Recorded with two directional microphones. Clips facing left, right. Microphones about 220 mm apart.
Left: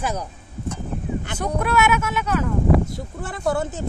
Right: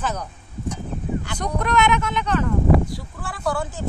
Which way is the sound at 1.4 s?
5° left (ahead or behind).